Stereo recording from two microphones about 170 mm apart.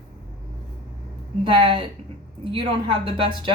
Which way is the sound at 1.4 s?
30° right (ahead or behind).